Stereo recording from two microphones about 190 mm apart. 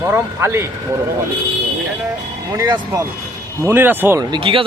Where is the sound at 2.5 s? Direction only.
20° right (ahead or behind).